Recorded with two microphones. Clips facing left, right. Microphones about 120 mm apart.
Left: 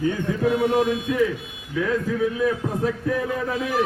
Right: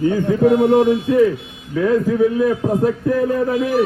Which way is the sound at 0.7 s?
30° right (ahead or behind).